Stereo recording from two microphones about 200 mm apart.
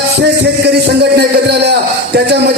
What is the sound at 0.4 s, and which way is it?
Music, 55° right (ahead or behind).